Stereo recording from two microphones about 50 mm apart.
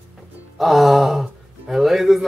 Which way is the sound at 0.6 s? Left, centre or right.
Centre.